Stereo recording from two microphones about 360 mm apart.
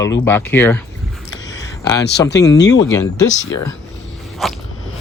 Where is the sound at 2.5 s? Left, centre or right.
Left.